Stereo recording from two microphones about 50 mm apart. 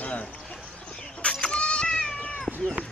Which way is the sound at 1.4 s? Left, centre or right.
Left.